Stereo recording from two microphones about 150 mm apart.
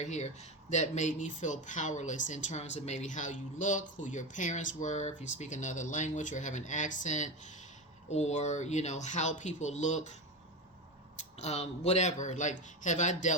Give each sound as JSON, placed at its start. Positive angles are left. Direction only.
{"t": 0.0, "sound": "speech", "side_deg": 50}
{"t": 11.3, "sound": "speech", "side_deg": 45}